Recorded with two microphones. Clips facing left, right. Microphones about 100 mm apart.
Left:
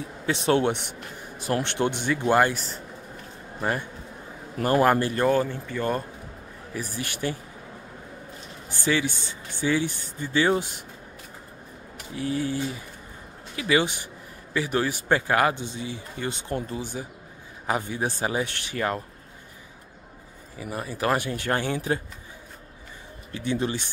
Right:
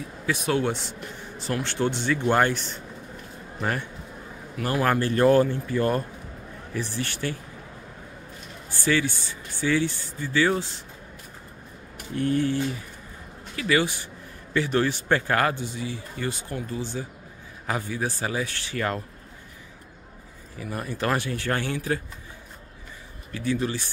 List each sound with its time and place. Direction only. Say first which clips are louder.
0.3 s a man's voice: left 3 dB; 25° left (ahead or behind); by 2.8 s 5° left (ahead or behind)
4.6 s a man's voice: left 5 dB; 40° left (ahead or behind)
4.8 s a man's voice: left 2 dB; 15° left (ahead or behind)
5.2 s speech: right 4 dB; centre (ahead or behind)
6.7 s a man's voice: right 2 dB; 10° left (ahead or behind)
8.6 s speech: right 1 dB; 15° left (ahead or behind)
12.2 s a man's voice: right 3 dB; 10° left (ahead or behind)
20.5 s a man's voice: even; 15° left (ahead or behind)
23.3 s speech: even; 25° left (ahead or behind)